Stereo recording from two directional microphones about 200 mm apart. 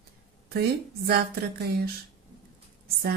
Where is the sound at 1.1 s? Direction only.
55° right (ahead or behind).